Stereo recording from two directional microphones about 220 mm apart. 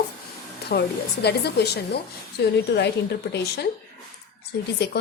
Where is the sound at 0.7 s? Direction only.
50° left (ahead or behind).